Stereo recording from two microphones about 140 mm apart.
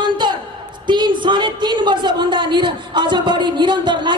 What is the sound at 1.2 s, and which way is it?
Speech, 30° right (ahead or behind).